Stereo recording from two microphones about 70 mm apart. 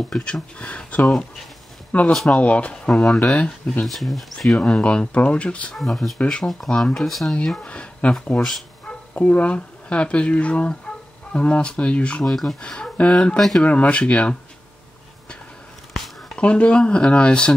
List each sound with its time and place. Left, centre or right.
0.2 s speech: centre
3.8 s speech: centre
4.6 s speech: centre
5.8 s speech: centre
8.4 s speech: centre
8.8 s speech: left
16.3 s speech: centre